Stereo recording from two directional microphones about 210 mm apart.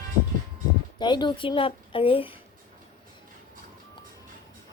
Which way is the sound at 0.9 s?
20° left (ahead or behind).